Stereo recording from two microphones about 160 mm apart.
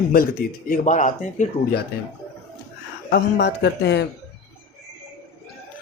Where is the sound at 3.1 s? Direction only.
90° left.